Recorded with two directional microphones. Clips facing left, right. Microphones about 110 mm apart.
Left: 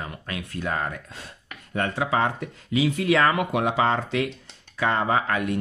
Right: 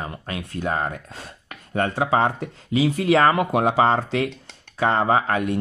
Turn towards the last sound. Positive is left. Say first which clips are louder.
# right 3 dB
turn(degrees=-30)  # may be behind; listen again after turning